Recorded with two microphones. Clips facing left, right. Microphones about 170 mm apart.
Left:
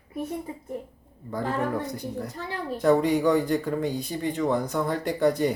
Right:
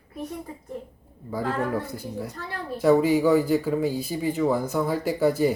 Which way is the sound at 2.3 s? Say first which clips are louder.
Left 2 dB; 20° left (ahead or behind).